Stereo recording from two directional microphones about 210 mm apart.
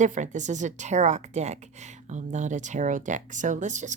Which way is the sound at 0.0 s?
35° right (ahead or behind).